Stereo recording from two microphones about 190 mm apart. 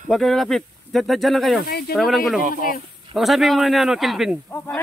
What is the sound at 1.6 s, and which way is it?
Speech, 55° left (ahead or behind).